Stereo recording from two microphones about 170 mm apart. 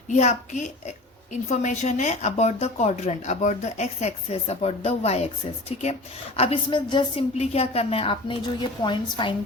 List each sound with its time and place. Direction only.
0.1 s a woman's voice: 45° left (ahead or behind); by 9.3 s 30° left (ahead or behind)